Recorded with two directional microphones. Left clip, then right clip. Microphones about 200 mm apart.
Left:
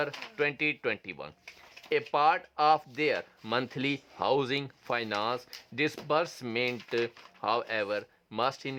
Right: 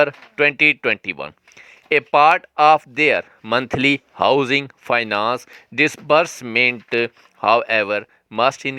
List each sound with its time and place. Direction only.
0.0 s speech: 35° right (ahead or behind)